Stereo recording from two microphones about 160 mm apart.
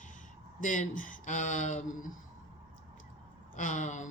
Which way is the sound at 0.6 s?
55° left (ahead or behind).